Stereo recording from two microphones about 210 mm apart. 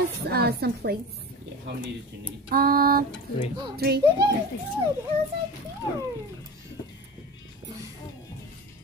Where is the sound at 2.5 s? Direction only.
45° right (ahead or behind).